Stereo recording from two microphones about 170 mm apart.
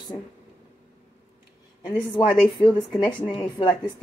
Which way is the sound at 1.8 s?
30° left (ahead or behind).